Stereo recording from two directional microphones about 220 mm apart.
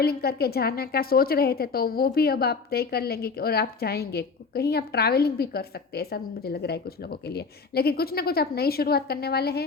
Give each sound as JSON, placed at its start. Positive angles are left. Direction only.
{"t": 0.0, "sound": "a woman's voice", "side_deg": 45}